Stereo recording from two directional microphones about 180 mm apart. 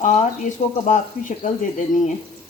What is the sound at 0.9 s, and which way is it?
Speech, 45° left (ahead or behind).